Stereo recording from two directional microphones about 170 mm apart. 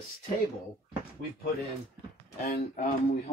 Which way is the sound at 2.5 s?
60° left (ahead or behind).